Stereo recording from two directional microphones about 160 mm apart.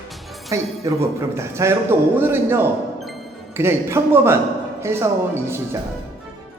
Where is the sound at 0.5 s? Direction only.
20° right (ahead or behind).